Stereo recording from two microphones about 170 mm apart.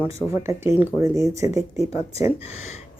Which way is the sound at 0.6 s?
10° right (ahead or behind).